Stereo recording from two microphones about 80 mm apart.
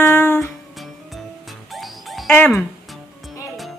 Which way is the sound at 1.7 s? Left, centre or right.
Centre.